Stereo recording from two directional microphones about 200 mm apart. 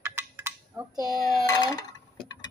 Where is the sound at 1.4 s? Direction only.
20° left (ahead or behind).